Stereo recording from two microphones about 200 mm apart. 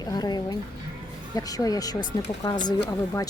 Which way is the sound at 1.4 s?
20° left (ahead or behind).